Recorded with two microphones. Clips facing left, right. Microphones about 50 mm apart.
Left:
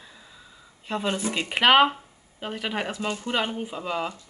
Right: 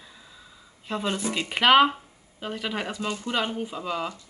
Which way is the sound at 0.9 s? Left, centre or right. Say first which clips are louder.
Left 1 dB; centre.